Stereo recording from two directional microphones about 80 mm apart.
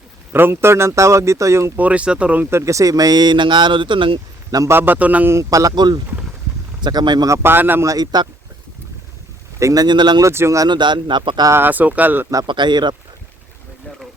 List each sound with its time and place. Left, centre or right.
0.3 s speech: right
1.7 s speech: centre
2.5 s speech: right
4.7 s speech: right
5.3 s speech: right
5.7 s speech: right
7.4 s speech: right
7.9 s speech: right
9.6 s speech: right
9.8 s speech: right
10.2 s speech: right
10.7 s speech: right
11.5 s speech: right
12.5 s speech: right